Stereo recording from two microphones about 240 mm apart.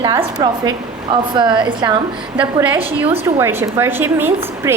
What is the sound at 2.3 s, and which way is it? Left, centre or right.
A woman's voice, centre.